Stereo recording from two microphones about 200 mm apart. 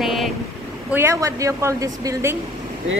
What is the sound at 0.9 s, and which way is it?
A woman's voice, 15° right (ahead or behind).